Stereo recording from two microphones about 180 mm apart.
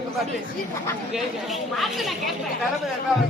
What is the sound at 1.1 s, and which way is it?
Speech, centre (ahead or behind).